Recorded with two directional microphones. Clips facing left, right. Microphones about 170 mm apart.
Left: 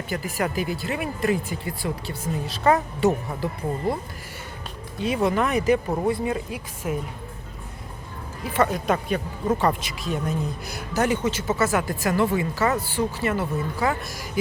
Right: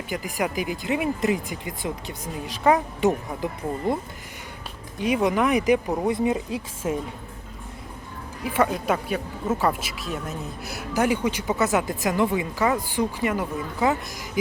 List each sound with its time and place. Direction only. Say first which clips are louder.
0.1 s speech: even; 15° right (ahead or behind)
4.9 s speech: right 1 dB; 15° right (ahead or behind)
8.4 s speech: even; 10° right (ahead or behind)